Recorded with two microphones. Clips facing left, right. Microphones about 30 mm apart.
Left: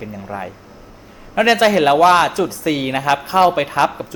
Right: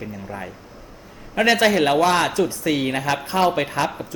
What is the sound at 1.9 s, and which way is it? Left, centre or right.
Speech, centre.